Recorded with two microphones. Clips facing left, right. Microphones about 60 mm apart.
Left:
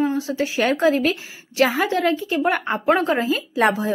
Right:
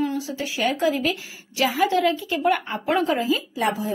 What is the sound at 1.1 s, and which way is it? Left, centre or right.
A woman's voice, left.